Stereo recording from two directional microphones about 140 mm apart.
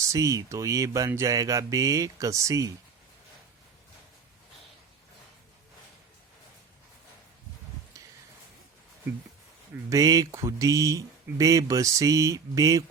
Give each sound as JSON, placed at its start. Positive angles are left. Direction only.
{"t": 0.0, "sound": "speech", "side_deg": -25}
{"t": 9.9, "sound": "speech", "side_deg": -25}